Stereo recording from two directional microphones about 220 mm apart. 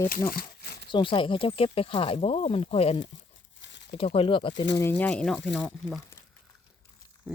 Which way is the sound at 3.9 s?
25° left (ahead or behind).